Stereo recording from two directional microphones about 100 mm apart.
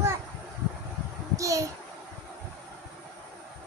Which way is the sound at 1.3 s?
30° right (ahead or behind).